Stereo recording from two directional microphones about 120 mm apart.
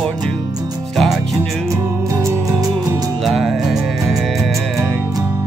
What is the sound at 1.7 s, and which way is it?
Music, 25° right (ahead or behind).